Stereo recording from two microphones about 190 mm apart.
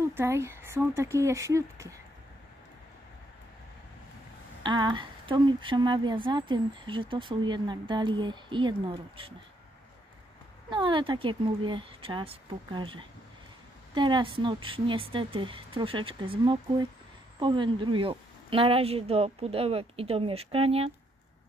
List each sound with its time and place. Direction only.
0.0 s speech: 15° right (ahead or behind)
4.6 s speech: 25° right (ahead or behind)
10.7 s speech: 25° right (ahead or behind)
17.4 s a woman's voice: 25° right (ahead or behind)